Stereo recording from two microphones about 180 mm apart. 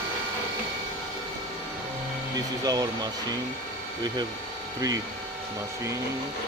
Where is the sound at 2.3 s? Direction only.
20° right (ahead or behind).